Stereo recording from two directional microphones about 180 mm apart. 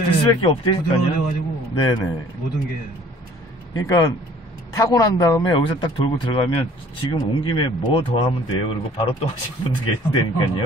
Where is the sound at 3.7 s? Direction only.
20° left (ahead or behind).